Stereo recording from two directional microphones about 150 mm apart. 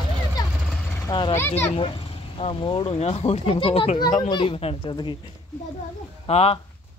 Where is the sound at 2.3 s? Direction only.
35° left (ahead or behind).